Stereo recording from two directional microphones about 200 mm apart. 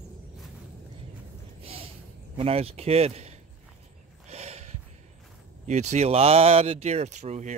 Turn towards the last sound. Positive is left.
turn(degrees=-35)  # may be behind; listen again after turning